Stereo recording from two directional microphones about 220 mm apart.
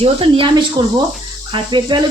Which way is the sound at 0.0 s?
25° right (ahead or behind).